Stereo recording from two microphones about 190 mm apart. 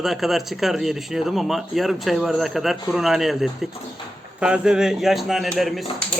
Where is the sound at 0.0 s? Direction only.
Centre (ahead or behind).